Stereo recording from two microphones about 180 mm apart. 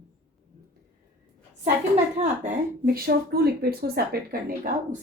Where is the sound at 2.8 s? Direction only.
60° right (ahead or behind).